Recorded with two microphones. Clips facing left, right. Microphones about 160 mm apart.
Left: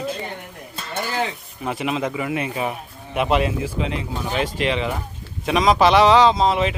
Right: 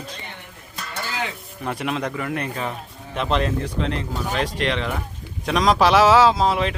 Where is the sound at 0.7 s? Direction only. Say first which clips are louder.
Left 4 dB; 25° left (ahead or behind).